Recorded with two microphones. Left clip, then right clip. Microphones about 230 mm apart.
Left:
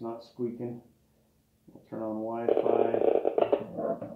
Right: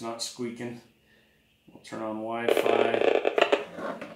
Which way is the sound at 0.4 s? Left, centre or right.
Right.